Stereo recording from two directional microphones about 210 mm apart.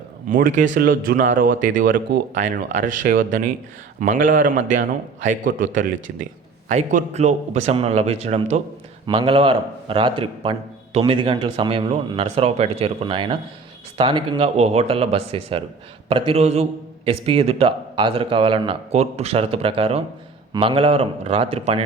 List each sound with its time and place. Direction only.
0.3 s a man's voice: 40° right (ahead or behind)
6.7 s a man's voice: 35° right (ahead or behind)